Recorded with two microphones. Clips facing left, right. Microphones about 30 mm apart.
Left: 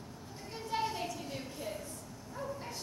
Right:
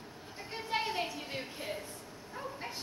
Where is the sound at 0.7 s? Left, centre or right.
Right.